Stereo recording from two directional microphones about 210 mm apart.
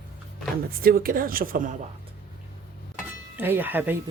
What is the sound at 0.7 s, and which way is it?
A woman's voice, 45° right (ahead or behind).